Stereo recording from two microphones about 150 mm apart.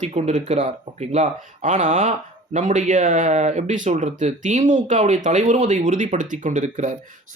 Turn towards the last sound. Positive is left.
turn(degrees=-55)  # may be behind; listen again after turning